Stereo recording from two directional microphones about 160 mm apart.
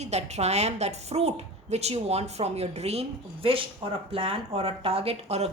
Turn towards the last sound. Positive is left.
turn(degrees=-40)  # may be behind; listen again after turning